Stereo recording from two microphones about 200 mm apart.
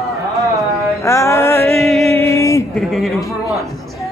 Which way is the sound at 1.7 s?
Centre (ahead or behind).